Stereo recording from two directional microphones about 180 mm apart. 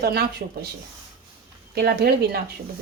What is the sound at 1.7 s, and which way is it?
Speech, 60° right (ahead or behind).